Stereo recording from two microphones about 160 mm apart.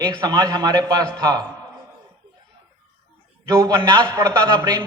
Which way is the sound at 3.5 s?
20° right (ahead or behind).